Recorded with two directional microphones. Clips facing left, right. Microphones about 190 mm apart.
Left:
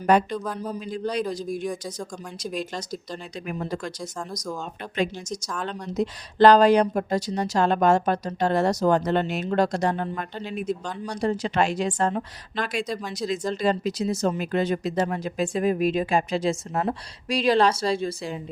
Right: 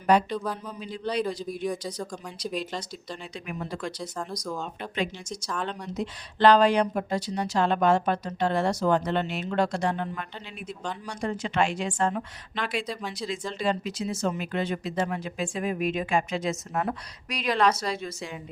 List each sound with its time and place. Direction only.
0.1 s a man's voice: 50° left (ahead or behind)
0.3 s speech: centre (ahead or behind)
0.7 s a man's voice: 45° left (ahead or behind)